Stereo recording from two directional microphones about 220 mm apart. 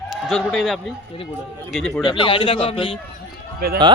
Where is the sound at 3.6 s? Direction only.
45° right (ahead or behind).